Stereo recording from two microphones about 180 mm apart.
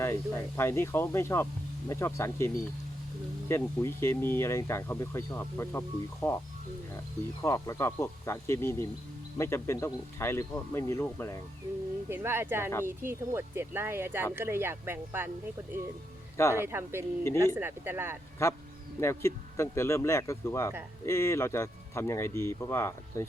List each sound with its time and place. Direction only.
0.0 s speech: 15° left (ahead or behind)
3.5 s speech: 15° left (ahead or behind)
7.4 s speech: 15° left (ahead or behind)
12.0 s speech: 15° right (ahead or behind)
16.6 s speech: 15° right (ahead or behind)
18.9 s speech: 15° left (ahead or behind)